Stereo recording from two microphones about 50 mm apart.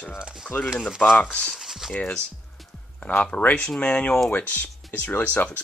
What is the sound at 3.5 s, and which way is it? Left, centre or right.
Speech, centre.